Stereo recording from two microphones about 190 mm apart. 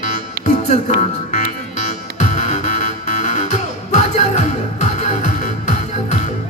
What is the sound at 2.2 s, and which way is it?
Music, 40° left (ahead or behind).